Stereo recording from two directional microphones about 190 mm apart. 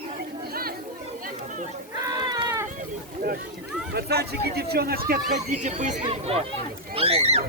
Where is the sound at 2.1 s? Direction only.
20° right (ahead or behind).